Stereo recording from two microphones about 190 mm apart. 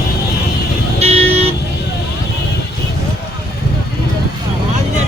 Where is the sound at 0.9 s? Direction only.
35° right (ahead or behind).